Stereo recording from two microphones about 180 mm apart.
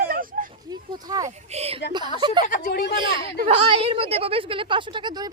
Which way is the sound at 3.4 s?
30° right (ahead or behind).